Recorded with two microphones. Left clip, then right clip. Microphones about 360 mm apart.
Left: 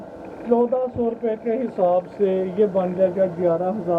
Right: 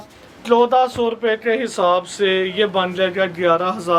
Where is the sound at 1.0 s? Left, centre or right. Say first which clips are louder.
Right 5 dB; right.